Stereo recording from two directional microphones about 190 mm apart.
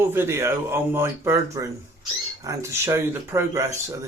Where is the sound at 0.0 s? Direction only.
10° right (ahead or behind).